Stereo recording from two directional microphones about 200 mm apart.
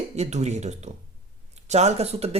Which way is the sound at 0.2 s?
35° right (ahead or behind).